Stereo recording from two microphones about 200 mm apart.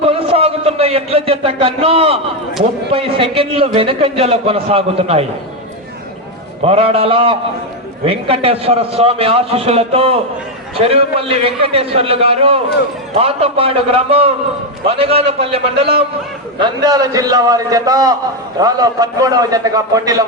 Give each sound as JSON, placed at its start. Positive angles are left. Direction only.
{"t": 0.0, "sound": "a sound", "side_deg": -30}
{"t": 2.9, "sound": "a man's voice", "side_deg": -25}
{"t": 6.7, "sound": "a man's voice", "side_deg": -30}
{"t": 16.6, "sound": "a man's voice", "side_deg": -20}